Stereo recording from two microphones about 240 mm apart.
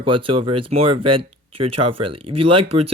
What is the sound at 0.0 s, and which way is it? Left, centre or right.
Speech, right.